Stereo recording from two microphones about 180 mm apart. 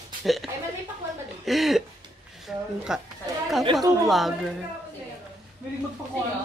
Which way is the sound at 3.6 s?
20° right (ahead or behind).